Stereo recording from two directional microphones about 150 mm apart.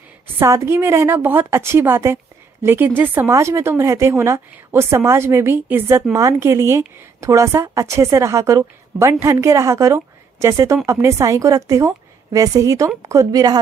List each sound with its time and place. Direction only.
0.4 s a woman's voice: 15° right (ahead or behind)